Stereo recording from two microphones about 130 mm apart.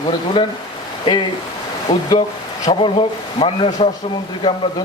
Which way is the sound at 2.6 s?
45° left (ahead or behind).